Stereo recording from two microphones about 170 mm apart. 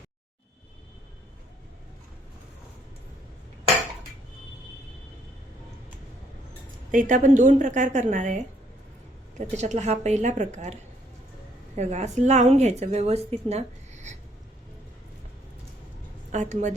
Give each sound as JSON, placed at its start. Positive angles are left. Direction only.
{"t": 6.9, "sound": "a woman's voice", "side_deg": -50}
{"t": 9.6, "sound": "a woman's voice", "side_deg": -40}
{"t": 11.8, "sound": "a woman's voice", "side_deg": -40}
{"t": 16.3, "sound": "a woman's voice", "side_deg": -45}